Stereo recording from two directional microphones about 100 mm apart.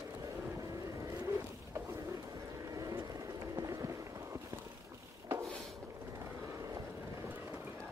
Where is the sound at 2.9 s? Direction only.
35° right (ahead or behind).